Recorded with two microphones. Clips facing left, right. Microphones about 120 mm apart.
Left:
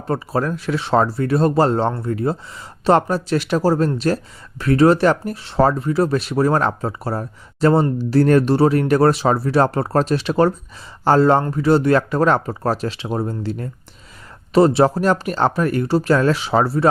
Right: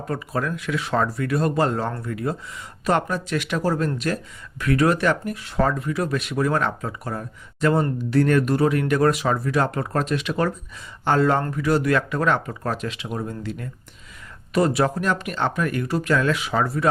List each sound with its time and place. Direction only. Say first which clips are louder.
0.1 s speech: left 6 dB; 35° left (ahead or behind)